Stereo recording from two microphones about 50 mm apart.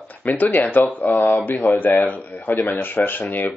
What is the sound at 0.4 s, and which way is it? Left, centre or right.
Speech, left.